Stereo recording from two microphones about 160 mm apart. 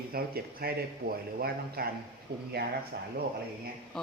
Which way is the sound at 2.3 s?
90° right.